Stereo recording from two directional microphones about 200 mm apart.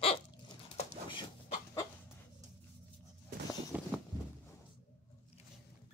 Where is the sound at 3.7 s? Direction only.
10° right (ahead or behind).